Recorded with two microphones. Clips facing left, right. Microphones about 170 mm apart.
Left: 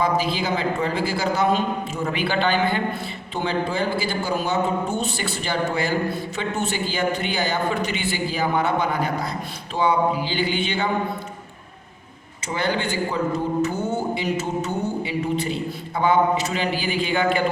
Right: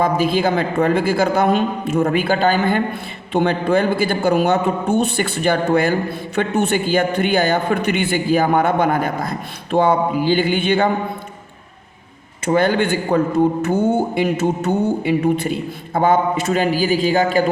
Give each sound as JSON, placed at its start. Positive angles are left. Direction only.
{"t": 0.0, "sound": "a man's voice", "side_deg": -50}
{"t": 3.3, "sound": "a man's voice", "side_deg": -55}
{"t": 12.5, "sound": "a man's voice", "side_deg": -50}